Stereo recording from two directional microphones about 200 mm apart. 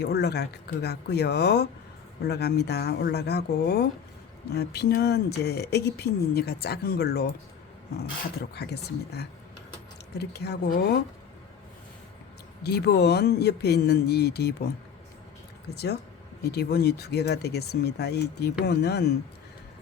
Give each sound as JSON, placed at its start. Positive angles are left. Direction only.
{"t": 0.0, "sound": "speech", "side_deg": 55}
{"t": 8.5, "sound": "speech", "side_deg": 55}
{"t": 12.6, "sound": "speech", "side_deg": 55}
{"t": 15.7, "sound": "speech", "side_deg": 55}